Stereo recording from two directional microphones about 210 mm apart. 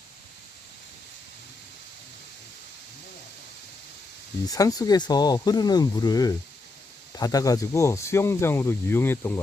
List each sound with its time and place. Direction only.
4.4 s speech: 15° left (ahead or behind)